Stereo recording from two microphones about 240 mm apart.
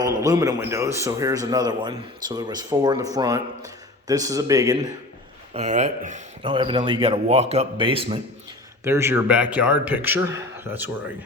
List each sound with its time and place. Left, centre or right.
0.2 s a man's voice: centre
5.5 s speech: right
8.8 s a man's voice: centre